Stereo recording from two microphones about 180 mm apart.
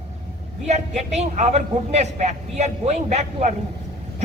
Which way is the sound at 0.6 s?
40° right (ahead or behind).